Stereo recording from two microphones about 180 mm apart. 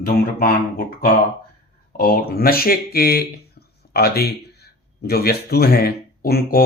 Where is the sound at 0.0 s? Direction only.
55° left (ahead or behind).